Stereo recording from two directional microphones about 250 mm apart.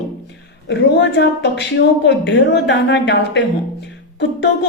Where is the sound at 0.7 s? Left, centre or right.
Left.